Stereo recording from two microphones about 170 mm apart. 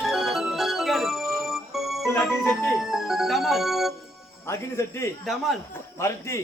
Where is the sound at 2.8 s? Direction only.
Centre (ahead or behind).